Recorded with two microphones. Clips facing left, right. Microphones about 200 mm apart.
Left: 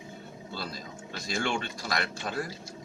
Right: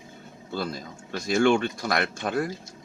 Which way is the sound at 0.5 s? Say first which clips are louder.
Right 8 dB; 50° right (ahead or behind).